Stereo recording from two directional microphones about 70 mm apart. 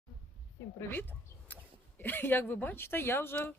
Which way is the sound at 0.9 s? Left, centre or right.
Left.